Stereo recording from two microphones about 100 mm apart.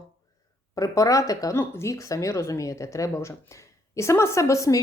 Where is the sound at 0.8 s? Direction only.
35° left (ahead or behind).